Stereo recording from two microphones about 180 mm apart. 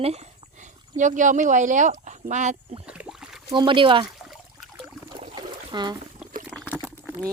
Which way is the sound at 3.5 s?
25° right (ahead or behind).